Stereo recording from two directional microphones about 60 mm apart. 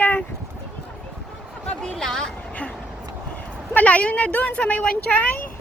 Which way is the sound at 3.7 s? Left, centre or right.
Left.